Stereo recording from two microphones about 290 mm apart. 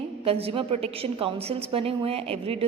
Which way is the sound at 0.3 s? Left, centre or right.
Centre.